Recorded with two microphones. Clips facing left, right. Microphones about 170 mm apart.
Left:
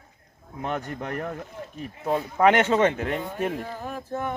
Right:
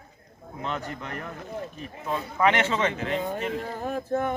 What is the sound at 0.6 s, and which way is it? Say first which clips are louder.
Speech: left 3 dB; 55° left (ahead or behind).